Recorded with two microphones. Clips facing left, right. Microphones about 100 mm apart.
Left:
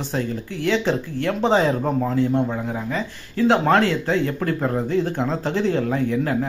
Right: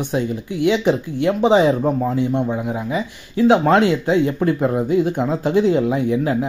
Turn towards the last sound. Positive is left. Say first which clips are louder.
# right 3 dB
turn(degrees=-15)  # may be behind; listen again after turning